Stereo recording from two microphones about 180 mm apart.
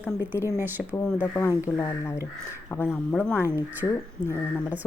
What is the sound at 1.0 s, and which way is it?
Speech, 10° left (ahead or behind).